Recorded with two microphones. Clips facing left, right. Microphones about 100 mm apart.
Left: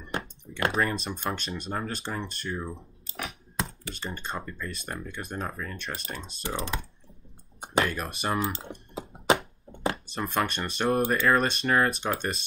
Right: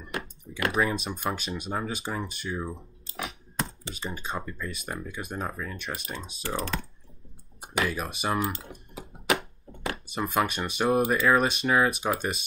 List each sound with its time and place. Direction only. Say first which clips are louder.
0.1 s typing: left 2 dB; 30° left (ahead or behind)
0.7 s speech: right 1 dB; centre (ahead or behind)
3.9 s speech: right 1 dB; 5° right (ahead or behind)
6.4 s speech: right 1 dB; 20° left (ahead or behind)
7.8 s speech: right 1 dB; centre (ahead or behind)
8.5 s a sound: left 4 dB; 30° left (ahead or behind)
10.0 s speech: right 7 dB; 5° right (ahead or behind)